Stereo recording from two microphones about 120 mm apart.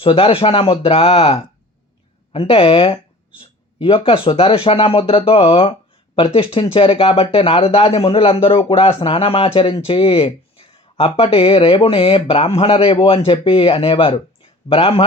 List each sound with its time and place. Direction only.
0.0 s speech: 50° left (ahead or behind)